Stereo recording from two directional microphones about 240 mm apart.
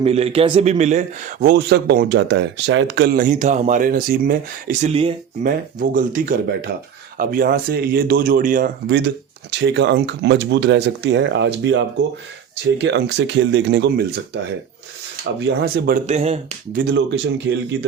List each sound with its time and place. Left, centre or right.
0.0 s a man's voice: right
5.4 s a man's voice: right
8.9 s speech: right
15.4 s a man's voice: right
16.0 s speech: right
16.8 s speech: right